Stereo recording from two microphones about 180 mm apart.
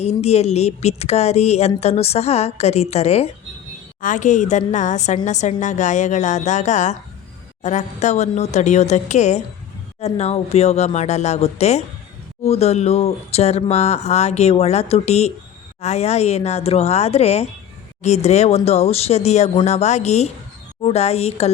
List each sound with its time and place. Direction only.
0.0 s speech: 35° left (ahead or behind)